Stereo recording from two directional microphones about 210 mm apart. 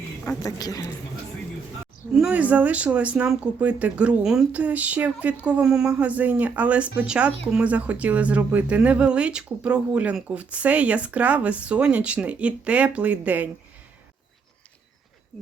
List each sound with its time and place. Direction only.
0.3 s speech: 15° left (ahead or behind)
2.1 s speech: 5° right (ahead or behind)